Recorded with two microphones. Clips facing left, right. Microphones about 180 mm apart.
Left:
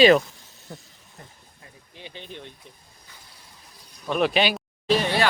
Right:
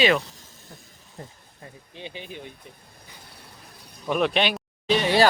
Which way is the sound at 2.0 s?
20° right (ahead or behind).